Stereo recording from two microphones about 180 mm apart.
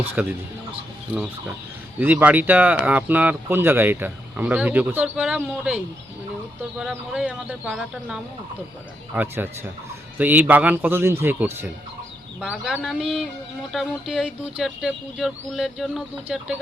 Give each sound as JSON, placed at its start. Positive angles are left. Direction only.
{"t": 0.0, "sound": "speech", "side_deg": -10}